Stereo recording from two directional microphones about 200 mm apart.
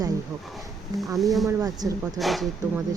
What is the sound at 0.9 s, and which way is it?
Speech, centre (ahead or behind).